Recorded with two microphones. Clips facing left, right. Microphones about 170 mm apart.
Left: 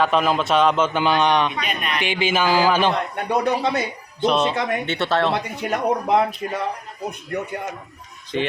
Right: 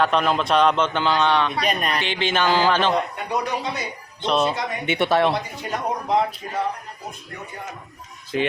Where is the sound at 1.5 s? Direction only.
40° right (ahead or behind).